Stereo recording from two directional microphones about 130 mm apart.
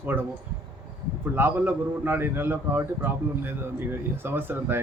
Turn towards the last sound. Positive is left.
turn(degrees=-15)  # may be behind; listen again after turning